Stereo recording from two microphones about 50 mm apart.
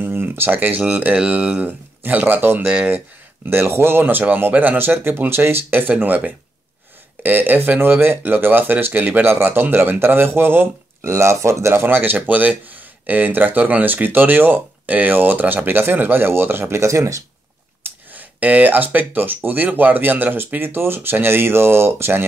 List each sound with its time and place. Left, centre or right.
0.0 s speech: right
1.1 s speech: right
2.6 s speech: right
3.4 s speech: right
11.1 s speech: right
11.7 s speech: right
16.8 s speech: right
18.1 s speech: right